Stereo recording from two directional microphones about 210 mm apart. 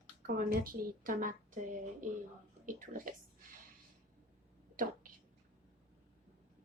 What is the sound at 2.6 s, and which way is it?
Speech, 40° right (ahead or behind).